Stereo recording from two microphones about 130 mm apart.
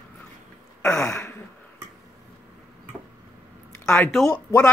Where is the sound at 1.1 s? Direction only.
20° left (ahead or behind).